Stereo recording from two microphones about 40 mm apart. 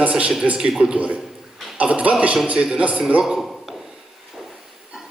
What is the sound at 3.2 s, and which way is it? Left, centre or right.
Speech, centre.